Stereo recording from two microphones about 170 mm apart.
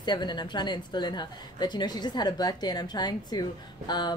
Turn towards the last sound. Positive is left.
turn(degrees=25)  # may be behind; listen again after turning